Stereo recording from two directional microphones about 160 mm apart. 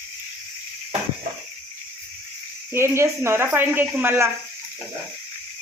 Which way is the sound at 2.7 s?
15° right (ahead or behind).